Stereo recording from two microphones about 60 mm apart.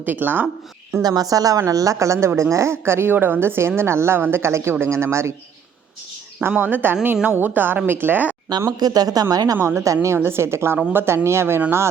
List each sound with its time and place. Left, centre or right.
0.0 s speech: right
1.0 s a woman's voice: right
6.6 s speech: right
8.8 s speech: right
9.6 s speech: right
10.2 s speech: right